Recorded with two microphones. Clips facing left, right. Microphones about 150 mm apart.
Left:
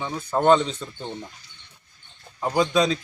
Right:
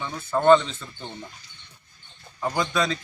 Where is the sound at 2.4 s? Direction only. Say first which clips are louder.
Left 4 dB; 15° left (ahead or behind).